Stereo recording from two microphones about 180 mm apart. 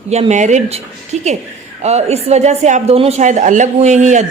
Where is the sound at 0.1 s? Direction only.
40° right (ahead or behind).